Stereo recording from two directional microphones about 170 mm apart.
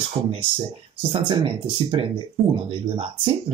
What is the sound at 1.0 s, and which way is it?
Speech, 35° right (ahead or behind).